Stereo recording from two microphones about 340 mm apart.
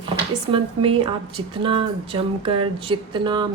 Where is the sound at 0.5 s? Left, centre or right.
Centre.